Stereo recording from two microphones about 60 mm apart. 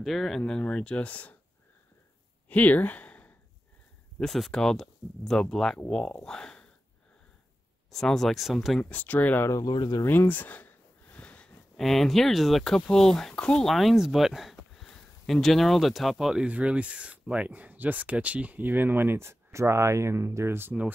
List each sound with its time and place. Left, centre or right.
0.0 s speech: centre
0.5 s speech: centre
2.5 s speech: left
4.2 s speech: centre
7.9 s speech: centre
8.8 s speech: left
9.5 s speech: left
10.0 s a sound: left
11.7 s speech: centre
13.7 s speech: centre
16.4 s speech: right